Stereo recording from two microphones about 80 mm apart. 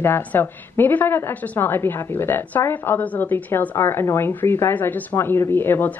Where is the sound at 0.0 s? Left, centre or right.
Left.